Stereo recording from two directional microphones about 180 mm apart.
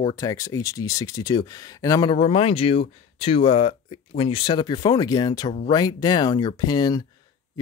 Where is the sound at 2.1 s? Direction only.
30° left (ahead or behind).